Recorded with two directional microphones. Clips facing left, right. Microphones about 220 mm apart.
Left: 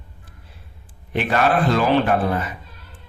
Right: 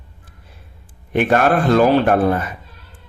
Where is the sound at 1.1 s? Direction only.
50° right (ahead or behind).